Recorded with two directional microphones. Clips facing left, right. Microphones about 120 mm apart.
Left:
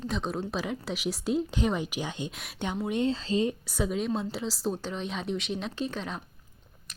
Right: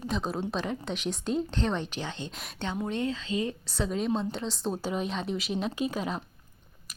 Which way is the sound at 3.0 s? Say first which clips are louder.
Left 4 dB; 25° left (ahead or behind).